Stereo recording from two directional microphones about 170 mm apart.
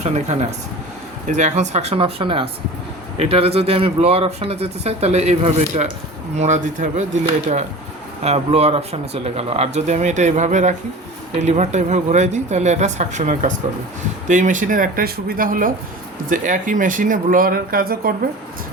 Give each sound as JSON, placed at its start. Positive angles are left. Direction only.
{"t": 0.0, "sound": "speech", "side_deg": -40}
{"t": 8.2, "sound": "speech", "side_deg": -35}